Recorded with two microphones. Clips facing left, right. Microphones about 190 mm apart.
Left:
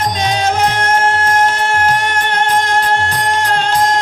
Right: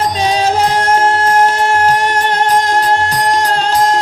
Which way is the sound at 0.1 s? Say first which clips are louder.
Right 2 dB; 35° right (ahead or behind).